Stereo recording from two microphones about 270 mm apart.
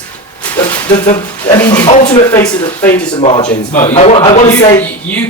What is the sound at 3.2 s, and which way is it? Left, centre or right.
A man's voice, left.